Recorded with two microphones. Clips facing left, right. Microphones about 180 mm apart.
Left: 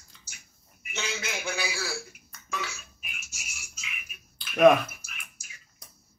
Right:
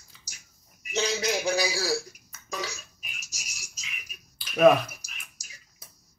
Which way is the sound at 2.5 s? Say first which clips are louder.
Right 1 dB; 40° right (ahead or behind).